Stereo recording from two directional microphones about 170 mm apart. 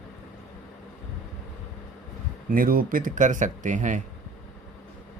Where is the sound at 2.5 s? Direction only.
55° right (ahead or behind).